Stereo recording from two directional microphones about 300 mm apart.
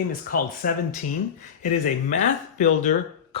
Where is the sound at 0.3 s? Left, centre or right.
Left.